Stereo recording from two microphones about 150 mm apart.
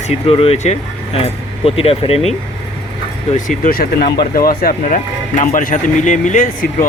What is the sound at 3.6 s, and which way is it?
Speech, 85° left.